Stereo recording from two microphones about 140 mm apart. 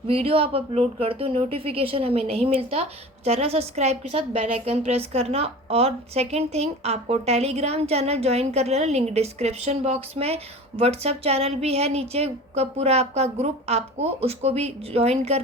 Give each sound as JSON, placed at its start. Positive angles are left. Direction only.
{"t": 0.1, "sound": "a woman's voice", "side_deg": -45}